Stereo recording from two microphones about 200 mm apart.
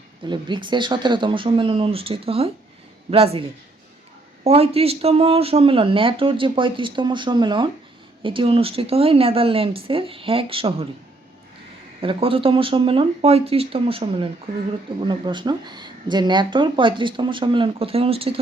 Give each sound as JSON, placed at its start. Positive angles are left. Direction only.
{"t": 0.3, "sound": "speech", "side_deg": -25}
{"t": 4.4, "sound": "speech", "side_deg": -30}
{"t": 11.9, "sound": "speech", "side_deg": -25}